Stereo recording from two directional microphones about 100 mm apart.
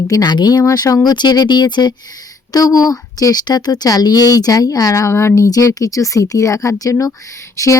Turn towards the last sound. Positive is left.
turn(degrees=35)  # may be behind; listen again after turning